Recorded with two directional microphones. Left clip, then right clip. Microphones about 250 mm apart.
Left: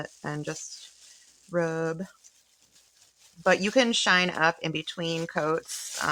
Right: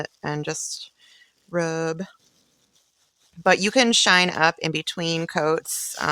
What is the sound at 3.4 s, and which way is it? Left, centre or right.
Speech, right.